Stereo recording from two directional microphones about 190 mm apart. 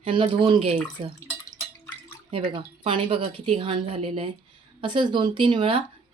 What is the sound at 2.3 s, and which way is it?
Speech, 25° right (ahead or behind).